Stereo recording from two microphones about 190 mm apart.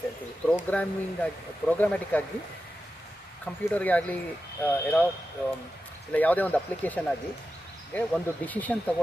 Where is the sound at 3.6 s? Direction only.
10° left (ahead or behind).